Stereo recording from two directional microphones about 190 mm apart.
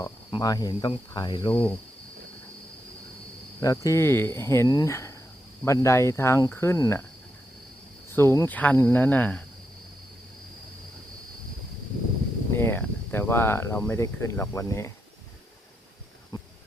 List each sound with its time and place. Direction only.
0.0 s speech: 20° left (ahead or behind)
3.6 s speech: 15° left (ahead or behind)
8.1 s speech: 15° left (ahead or behind)
12.5 s speech: 10° left (ahead or behind)
16.3 s a sound: 20° left (ahead or behind)